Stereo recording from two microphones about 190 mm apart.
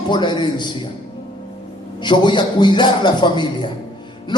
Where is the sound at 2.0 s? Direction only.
25° left (ahead or behind).